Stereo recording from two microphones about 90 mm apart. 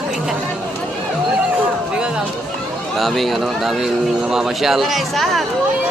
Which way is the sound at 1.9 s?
10° right (ahead or behind).